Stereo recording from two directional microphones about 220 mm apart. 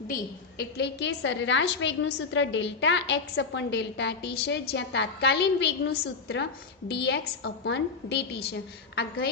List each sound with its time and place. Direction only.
0.1 s a woman's voice: 50° left (ahead or behind)